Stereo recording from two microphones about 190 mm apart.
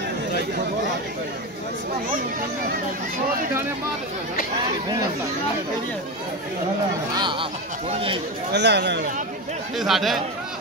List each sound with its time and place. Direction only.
7.2 s speech: 25° right (ahead or behind)
8.5 s speech: 65° right (ahead or behind)
9.8 s speech: centre (ahead or behind)